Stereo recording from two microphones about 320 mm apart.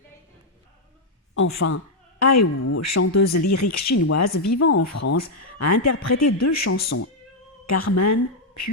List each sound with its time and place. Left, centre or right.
1.4 s a woman's voice: left